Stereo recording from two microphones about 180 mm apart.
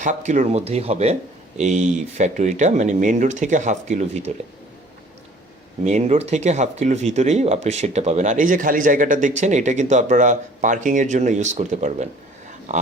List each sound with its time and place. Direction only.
0.0 s speech: 40° right (ahead or behind)
5.8 s speech: 40° right (ahead or behind)